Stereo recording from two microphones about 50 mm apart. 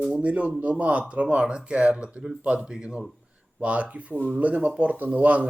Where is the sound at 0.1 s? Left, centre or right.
Right.